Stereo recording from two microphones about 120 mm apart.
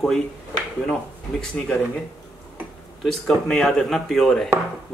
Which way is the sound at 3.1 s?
5° left (ahead or behind).